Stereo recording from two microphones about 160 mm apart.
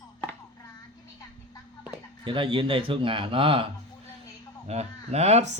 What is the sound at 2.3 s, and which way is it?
Speech, 35° right (ahead or behind).